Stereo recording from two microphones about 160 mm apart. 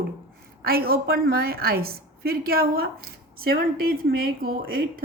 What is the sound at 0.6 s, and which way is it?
A woman's voice, 75° right (ahead or behind).